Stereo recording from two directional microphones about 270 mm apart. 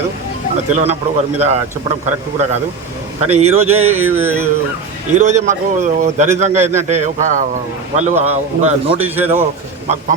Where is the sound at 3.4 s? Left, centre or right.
Right.